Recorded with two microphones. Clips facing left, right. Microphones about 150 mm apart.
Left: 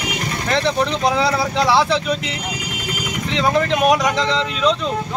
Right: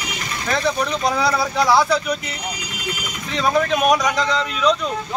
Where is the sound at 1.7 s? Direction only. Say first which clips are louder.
Left 1 dB; 25° left (ahead or behind).